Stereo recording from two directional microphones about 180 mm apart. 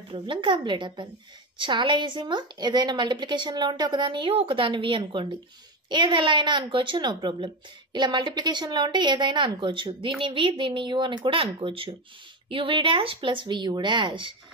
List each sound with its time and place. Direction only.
0.1 s a woman's voice: 25° right (ahead or behind)